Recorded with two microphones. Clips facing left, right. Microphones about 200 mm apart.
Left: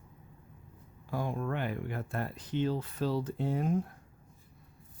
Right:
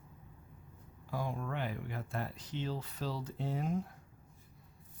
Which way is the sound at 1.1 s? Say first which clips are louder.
Left 4 dB; 55° left (ahead or behind).